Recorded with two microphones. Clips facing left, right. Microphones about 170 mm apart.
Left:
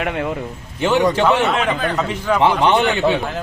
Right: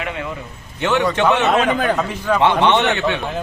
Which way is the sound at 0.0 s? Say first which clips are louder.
Left 4 dB; 55° left (ahead or behind).